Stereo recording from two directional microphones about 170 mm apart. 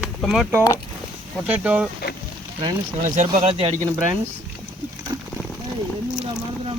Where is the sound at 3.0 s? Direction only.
45° right (ahead or behind).